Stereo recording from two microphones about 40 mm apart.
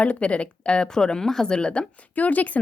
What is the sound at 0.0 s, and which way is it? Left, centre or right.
Speech, left.